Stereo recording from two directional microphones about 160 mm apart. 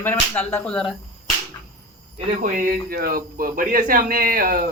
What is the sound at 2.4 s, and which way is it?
Speech, 60° right (ahead or behind).